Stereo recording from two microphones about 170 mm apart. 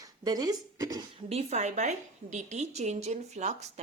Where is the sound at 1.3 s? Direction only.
40° right (ahead or behind).